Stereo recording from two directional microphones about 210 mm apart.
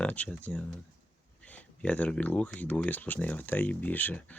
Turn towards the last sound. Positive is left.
turn(degrees=10)  # may be behind; listen again after turning